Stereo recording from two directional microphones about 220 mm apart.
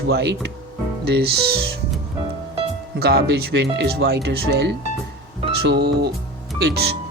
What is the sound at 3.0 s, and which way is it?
Speech, 50° right (ahead or behind).